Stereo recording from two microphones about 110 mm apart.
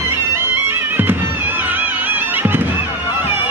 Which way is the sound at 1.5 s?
15° right (ahead or behind).